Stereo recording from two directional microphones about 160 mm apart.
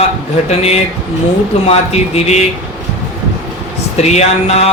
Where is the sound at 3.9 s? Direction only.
45° left (ahead or behind).